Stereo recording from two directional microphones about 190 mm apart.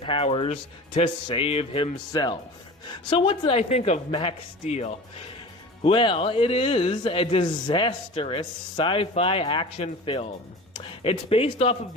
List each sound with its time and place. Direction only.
0.0 s a woman's voice: 30° left (ahead or behind)